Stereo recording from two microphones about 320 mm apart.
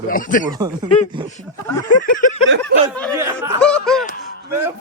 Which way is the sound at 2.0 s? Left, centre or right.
Left.